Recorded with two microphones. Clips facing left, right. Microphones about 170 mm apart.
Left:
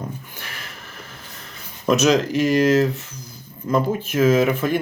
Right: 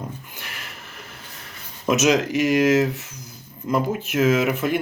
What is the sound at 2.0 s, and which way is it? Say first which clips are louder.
Speech: even; 15° right (ahead or behind).